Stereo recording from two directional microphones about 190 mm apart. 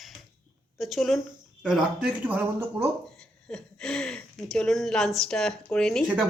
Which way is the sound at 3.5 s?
5° left (ahead or behind).